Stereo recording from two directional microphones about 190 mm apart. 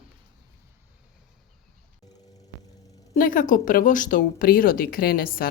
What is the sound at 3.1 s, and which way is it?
A woman's voice, 45° left (ahead or behind).